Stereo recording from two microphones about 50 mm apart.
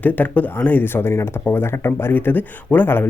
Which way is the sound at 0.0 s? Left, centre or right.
Left.